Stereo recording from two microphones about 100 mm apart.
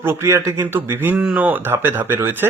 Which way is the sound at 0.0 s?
25° right (ahead or behind).